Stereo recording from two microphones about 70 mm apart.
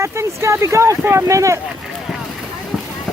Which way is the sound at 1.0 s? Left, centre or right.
Right.